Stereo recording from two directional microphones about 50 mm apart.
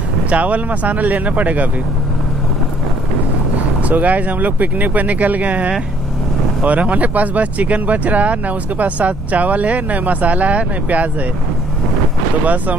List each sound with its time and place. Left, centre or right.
0.3 s speech: right
3.9 s speech: right